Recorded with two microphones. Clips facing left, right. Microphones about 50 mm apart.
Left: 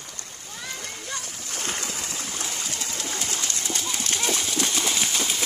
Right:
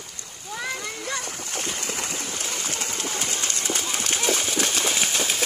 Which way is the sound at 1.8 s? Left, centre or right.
Right.